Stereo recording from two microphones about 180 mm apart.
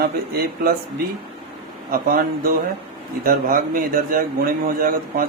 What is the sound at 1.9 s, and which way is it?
A man's voice, 50° right (ahead or behind).